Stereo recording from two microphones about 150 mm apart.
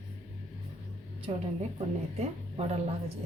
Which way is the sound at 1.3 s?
40° right (ahead or behind).